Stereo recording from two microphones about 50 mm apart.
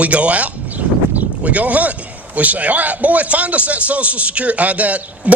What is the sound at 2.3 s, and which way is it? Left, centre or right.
A man's voice, right.